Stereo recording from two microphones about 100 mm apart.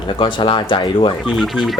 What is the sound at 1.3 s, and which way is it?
Speech, centre (ahead or behind).